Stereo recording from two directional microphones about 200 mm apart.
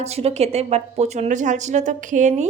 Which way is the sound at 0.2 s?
30° right (ahead or behind).